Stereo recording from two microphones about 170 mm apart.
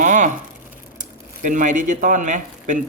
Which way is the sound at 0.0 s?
45° right (ahead or behind).